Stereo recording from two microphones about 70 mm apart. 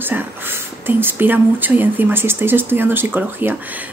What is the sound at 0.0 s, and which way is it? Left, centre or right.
Speech, right.